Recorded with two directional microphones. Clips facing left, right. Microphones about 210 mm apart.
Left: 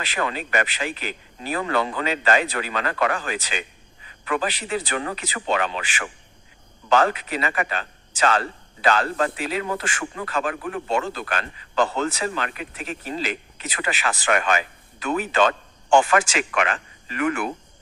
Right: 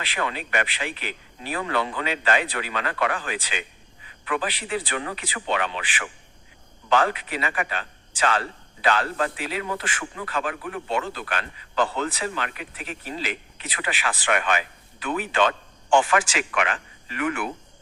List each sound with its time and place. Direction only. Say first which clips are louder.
0.0 s a man's voice: left 2 dB; 45° left (ahead or behind)